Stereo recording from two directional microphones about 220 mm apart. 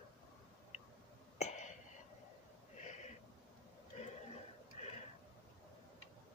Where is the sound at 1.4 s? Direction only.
30° left (ahead or behind).